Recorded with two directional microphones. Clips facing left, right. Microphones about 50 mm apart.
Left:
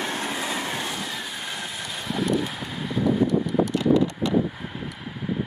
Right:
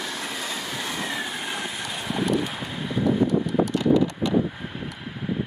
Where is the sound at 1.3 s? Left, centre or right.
Centre.